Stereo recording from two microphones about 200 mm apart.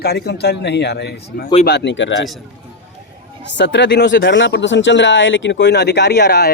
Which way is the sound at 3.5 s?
60° left (ahead or behind).